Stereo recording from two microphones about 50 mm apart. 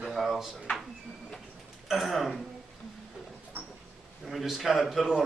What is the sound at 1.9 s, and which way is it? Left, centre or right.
Speech, centre.